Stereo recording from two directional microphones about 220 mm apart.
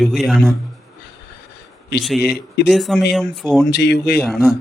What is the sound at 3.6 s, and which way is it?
Speech, 50° left (ahead or behind).